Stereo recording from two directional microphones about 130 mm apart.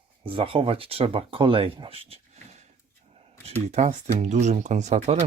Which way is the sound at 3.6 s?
65° right (ahead or behind).